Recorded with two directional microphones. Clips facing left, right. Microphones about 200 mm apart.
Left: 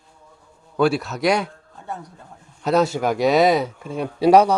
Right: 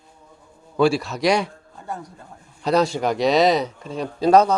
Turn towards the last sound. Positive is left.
turn(degrees=10)  # may be behind; listen again after turning